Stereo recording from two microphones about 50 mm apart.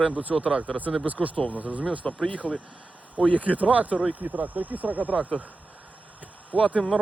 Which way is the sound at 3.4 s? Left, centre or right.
Right.